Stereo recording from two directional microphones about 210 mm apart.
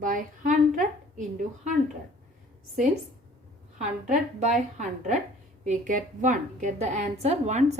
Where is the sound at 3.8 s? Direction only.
35° right (ahead or behind).